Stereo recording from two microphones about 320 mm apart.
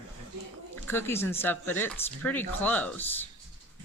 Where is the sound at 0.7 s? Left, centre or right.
Centre.